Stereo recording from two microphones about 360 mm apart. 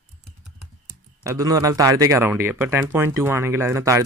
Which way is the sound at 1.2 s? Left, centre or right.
Centre.